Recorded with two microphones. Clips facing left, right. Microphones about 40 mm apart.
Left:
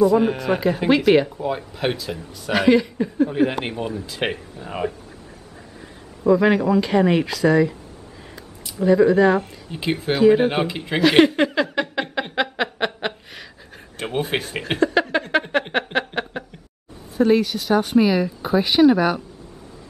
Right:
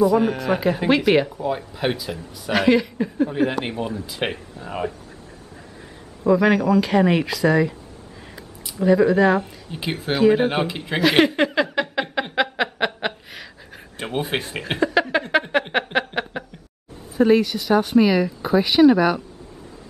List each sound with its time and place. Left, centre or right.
0.0 s speech: centre
6.3 s speech: centre
8.8 s speech: centre
15.0 s a sound: centre
17.3 s speech: centre